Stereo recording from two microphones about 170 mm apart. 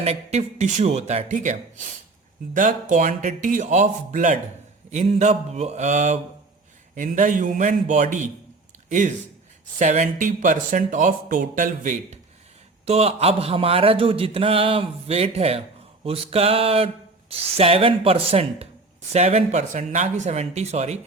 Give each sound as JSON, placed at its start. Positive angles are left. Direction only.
{"t": 0.0, "sound": "a man's voice", "side_deg": -40}
{"t": 12.8, "sound": "a man's voice", "side_deg": -35}